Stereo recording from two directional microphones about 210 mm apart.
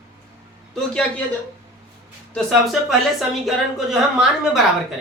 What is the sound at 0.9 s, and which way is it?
Speech, 5° left (ahead or behind).